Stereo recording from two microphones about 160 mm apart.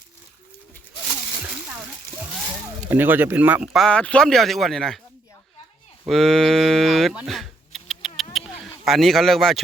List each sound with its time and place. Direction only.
2.9 s speech: 10° right (ahead or behind)
3.8 s speech: 5° left (ahead or behind)
6.1 s typing: centre (ahead or behind)
8.8 s speech: centre (ahead or behind)